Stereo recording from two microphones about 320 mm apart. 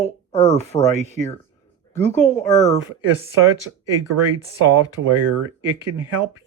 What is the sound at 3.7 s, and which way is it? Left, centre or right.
Speech, right.